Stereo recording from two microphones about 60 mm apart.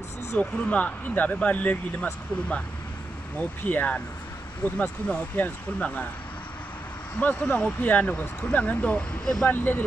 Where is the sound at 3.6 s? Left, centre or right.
Left.